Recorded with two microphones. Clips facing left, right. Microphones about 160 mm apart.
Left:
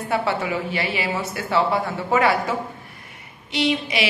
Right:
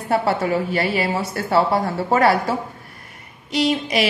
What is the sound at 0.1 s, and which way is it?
A woman's voice, 40° right (ahead or behind).